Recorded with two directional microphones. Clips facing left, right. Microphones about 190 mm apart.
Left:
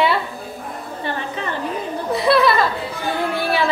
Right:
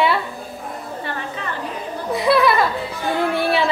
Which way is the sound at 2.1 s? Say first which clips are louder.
Even; 15° right (ahead or behind).